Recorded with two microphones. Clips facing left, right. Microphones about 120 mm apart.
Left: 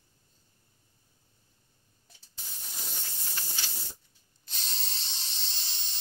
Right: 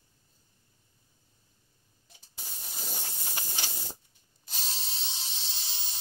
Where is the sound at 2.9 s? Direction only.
45° right (ahead or behind).